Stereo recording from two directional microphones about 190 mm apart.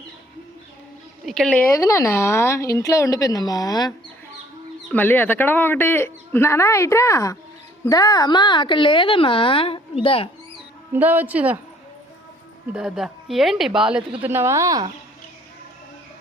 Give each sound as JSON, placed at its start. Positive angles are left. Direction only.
{"t": 1.2, "sound": "speech", "side_deg": 0}
{"t": 1.7, "sound": "speech", "side_deg": 15}
{"t": 4.9, "sound": "speech", "side_deg": 10}
{"t": 10.9, "sound": "speech", "side_deg": -10}
{"t": 12.7, "sound": "speech", "side_deg": 0}